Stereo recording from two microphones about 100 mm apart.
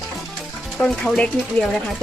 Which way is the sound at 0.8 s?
10° left (ahead or behind).